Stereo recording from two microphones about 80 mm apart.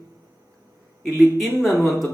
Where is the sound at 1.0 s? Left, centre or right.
Centre.